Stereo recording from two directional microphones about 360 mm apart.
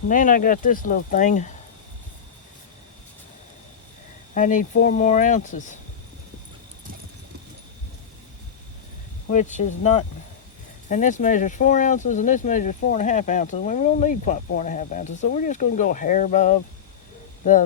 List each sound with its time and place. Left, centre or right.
0.1 s speech: left
4.4 s speech: left
9.4 s speech: centre
10.8 s speech: left